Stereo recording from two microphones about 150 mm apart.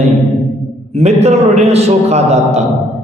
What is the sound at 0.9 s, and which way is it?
Speech, 45° right (ahead or behind).